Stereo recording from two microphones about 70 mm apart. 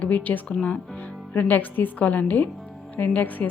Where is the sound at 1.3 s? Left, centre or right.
Left.